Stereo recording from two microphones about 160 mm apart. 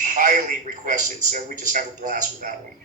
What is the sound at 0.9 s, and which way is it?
A man's voice, 55° right (ahead or behind).